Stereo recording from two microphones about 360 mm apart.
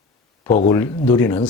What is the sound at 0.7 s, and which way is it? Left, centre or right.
Speech, centre.